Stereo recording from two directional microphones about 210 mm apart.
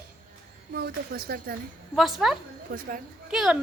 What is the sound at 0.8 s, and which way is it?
Speech, 45° right (ahead or behind).